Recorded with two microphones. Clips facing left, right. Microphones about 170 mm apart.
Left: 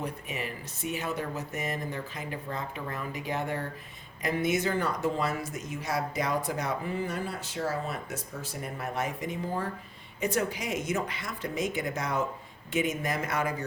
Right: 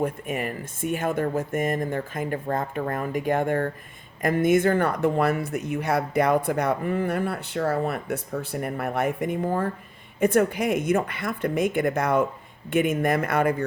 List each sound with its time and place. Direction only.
0.0 s speech: 50° right (ahead or behind)